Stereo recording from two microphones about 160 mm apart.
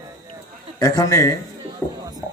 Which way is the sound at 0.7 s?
20° left (ahead or behind).